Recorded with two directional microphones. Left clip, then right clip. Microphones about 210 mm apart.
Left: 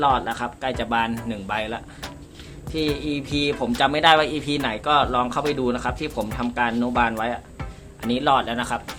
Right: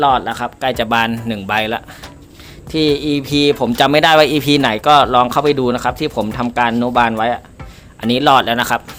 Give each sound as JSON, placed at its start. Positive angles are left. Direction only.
{"t": 0.0, "sound": "speech", "side_deg": -40}